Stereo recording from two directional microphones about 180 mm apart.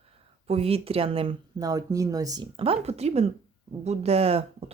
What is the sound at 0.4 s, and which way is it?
Speech, 35° right (ahead or behind).